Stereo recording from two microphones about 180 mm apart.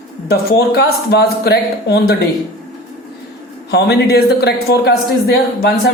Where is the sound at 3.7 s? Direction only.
65° left (ahead or behind).